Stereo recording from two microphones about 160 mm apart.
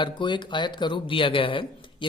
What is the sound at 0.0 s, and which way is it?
Speech, 30° left (ahead or behind).